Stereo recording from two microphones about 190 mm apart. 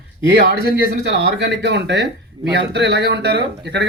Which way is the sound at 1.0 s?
70° right (ahead or behind).